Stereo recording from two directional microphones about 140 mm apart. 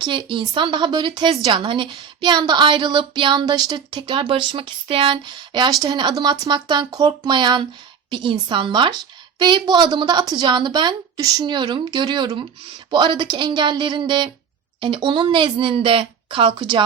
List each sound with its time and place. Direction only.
0.0 s a woman's voice: 35° right (ahead or behind)
1.3 s a woman's voice: 40° right (ahead or behind)